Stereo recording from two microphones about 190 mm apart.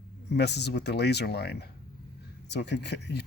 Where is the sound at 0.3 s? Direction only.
60° left (ahead or behind).